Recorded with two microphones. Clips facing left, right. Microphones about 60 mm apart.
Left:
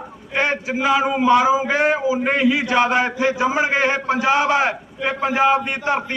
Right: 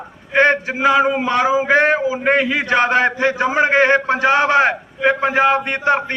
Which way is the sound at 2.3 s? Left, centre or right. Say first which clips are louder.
Right 3 dB; right.